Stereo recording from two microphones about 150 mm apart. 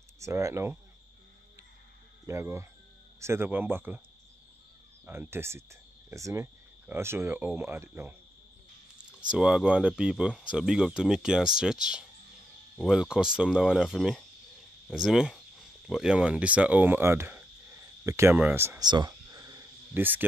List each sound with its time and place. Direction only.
0.2 s speech: 20° right (ahead or behind)
2.2 s speech: 20° right (ahead or behind)
5.0 s speech: 15° right (ahead or behind)
9.3 s speech: 5° right (ahead or behind)
18.8 s cricket: 30° right (ahead or behind)